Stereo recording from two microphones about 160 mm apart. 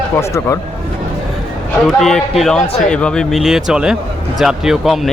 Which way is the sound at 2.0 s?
5° left (ahead or behind).